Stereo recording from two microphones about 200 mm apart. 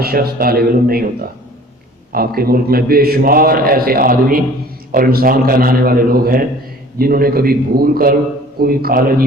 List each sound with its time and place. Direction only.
0.0 s a man's voice: 50° right (ahead or behind)